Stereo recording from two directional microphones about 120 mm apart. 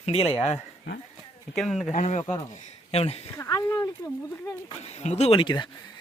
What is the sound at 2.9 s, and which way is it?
Speech, 55° left (ahead or behind).